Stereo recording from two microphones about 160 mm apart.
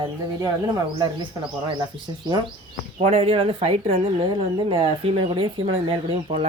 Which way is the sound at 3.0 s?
40° right (ahead or behind).